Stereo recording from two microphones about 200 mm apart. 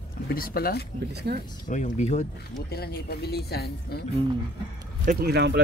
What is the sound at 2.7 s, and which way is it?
Speech, 50° left (ahead or behind).